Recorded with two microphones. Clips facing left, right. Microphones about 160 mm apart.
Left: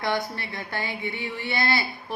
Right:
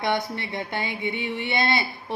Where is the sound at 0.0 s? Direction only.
20° right (ahead or behind).